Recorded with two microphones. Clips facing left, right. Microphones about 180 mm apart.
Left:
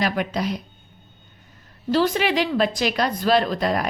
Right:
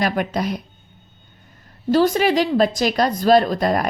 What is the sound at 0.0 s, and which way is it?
Speech, 50° right (ahead or behind).